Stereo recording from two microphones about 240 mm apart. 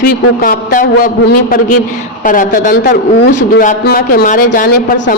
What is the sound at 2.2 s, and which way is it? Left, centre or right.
Speech, left.